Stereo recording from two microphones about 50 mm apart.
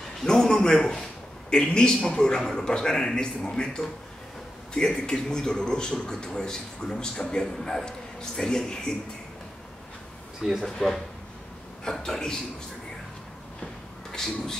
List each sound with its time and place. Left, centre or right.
0.2 s a man's voice: centre
10.4 s speech: centre
11.8 s a man's voice: centre
14.1 s speech: centre